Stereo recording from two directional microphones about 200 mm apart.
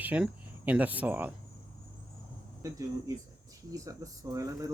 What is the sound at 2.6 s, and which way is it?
Speech, 15° right (ahead or behind).